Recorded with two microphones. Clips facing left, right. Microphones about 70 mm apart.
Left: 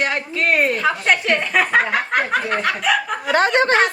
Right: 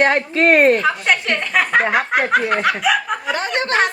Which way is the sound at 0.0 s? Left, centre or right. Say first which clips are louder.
Right 6 dB; right.